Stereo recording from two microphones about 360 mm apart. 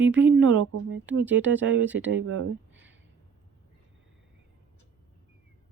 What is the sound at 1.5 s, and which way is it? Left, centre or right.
Speech, right.